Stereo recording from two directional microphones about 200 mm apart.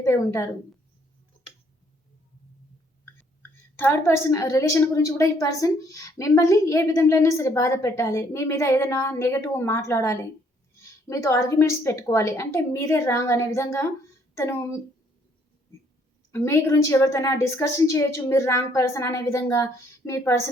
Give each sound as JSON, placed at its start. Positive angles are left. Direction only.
{"t": 0.0, "sound": "a woman's voice", "side_deg": 15}
{"t": 3.8, "sound": "a woman's voice", "side_deg": 10}
{"t": 16.3, "sound": "a woman's voice", "side_deg": 15}